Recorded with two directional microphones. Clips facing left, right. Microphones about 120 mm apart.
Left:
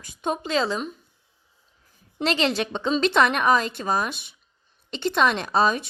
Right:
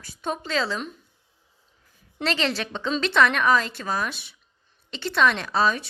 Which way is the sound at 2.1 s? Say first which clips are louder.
Left 3 dB; 20° left (ahead or behind).